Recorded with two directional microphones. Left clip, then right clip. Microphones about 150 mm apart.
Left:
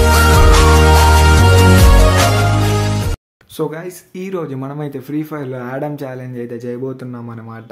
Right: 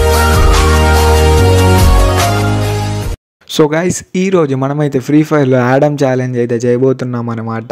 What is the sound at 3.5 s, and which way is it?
Speech, 55° right (ahead or behind).